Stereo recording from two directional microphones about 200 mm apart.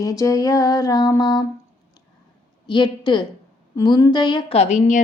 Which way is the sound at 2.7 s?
20° left (ahead or behind).